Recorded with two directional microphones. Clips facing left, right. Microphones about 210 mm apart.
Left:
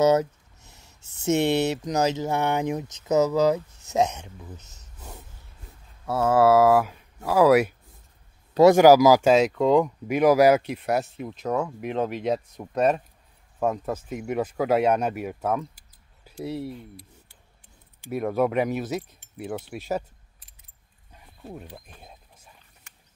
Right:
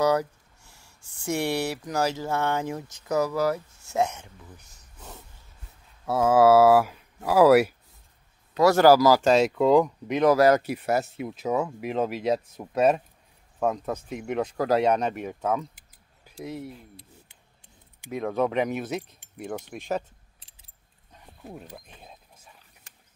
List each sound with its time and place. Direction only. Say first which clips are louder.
0.0 s speech: left 4 dB; 20° left (ahead or behind)
6.0 s speech: right 1 dB; 10° right (ahead or behind)
8.7 s speech: left 3 dB; 15° left (ahead or behind)
10.6 s speech: even; 5° right (ahead or behind)
18.1 s speech: left 2 dB; 5° left (ahead or behind)